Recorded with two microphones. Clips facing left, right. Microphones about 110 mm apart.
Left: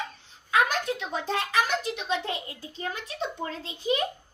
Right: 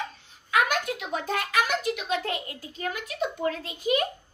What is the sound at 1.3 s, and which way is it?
A child's voice, 30° left (ahead or behind).